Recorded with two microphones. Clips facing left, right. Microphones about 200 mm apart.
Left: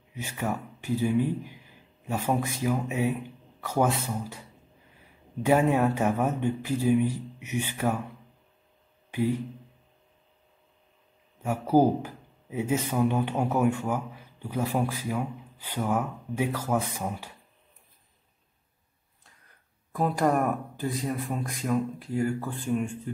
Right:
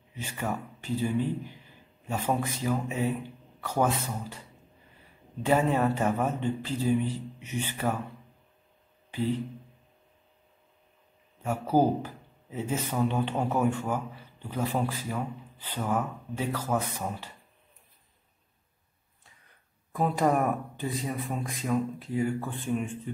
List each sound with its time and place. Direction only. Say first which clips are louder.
0.1 s speech: left 2 dB; 10° left (ahead or behind)
9.1 s speech: left 2 dB; 10° left (ahead or behind)
11.4 s speech: left 3 dB; 10° left (ahead or behind)
19.9 s speech: left 1 dB; centre (ahead or behind)